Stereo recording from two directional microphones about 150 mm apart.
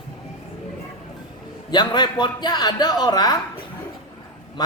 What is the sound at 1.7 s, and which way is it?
A man's voice, 30° left (ahead or behind).